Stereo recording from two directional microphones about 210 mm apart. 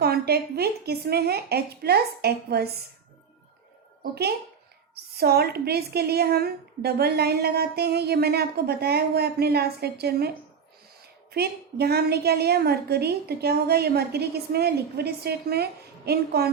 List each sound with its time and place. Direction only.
0.0 s a woman's voice: 50° right (ahead or behind)
4.1 s a woman's voice: 50° right (ahead or behind)